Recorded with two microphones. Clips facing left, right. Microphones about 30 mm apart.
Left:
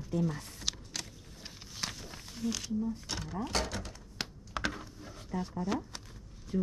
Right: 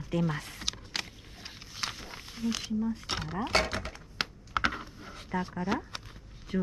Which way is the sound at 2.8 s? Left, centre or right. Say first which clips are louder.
Right 4 dB; right.